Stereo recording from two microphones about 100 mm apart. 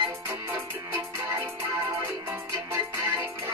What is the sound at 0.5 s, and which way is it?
Music, 20° right (ahead or behind).